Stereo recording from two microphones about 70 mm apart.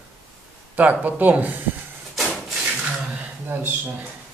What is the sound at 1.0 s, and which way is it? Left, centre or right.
Speech, right.